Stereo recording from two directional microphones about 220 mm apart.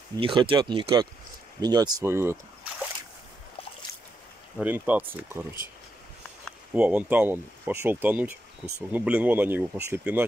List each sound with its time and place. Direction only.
0.2 s speech: 20° right (ahead or behind)
4.6 s speech: 10° right (ahead or behind)
6.4 s speech: 5° right (ahead or behind)